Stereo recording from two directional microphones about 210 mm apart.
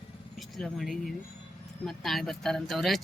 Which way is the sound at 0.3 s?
Centre (ahead or behind).